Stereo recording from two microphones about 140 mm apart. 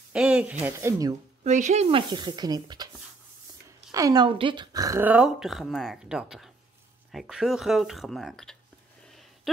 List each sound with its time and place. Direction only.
0.1 s speech: 5° right (ahead or behind)
1.4 s speech: 55° right (ahead or behind); by 2.9 s 30° right (ahead or behind)
3.9 s speech: 25° right (ahead or behind)
5.0 s speech: 5° right (ahead or behind)